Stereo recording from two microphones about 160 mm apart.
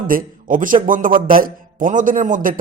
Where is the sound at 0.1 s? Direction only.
60° right (ahead or behind).